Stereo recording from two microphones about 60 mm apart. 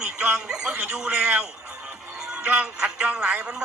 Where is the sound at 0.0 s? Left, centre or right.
Centre.